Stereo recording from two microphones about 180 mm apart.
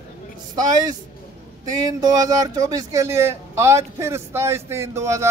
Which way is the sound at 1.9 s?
20° right (ahead or behind).